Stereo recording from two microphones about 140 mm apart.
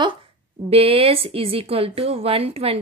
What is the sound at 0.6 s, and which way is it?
Speech, 45° right (ahead or behind).